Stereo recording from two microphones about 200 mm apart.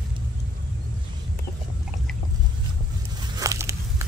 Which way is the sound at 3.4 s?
15° right (ahead or behind).